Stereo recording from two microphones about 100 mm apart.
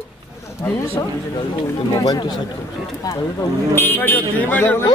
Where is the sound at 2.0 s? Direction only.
45° left (ahead or behind).